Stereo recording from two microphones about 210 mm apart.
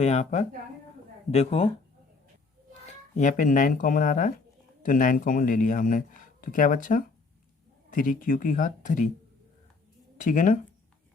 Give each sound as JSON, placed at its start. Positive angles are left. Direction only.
{"t": 0.0, "sound": "speech", "side_deg": 35}
{"t": 2.8, "sound": "speech", "side_deg": 35}
{"t": 10.2, "sound": "speech", "side_deg": 40}